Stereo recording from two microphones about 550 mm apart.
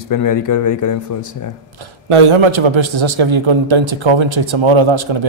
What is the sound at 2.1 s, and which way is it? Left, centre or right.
A man's voice, right.